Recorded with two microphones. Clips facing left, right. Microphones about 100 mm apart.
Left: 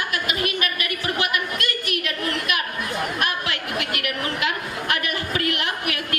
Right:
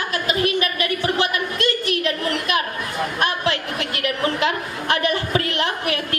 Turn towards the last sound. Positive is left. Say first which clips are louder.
# right 3 dB
turn(degrees=-30)  # may be behind; listen again after turning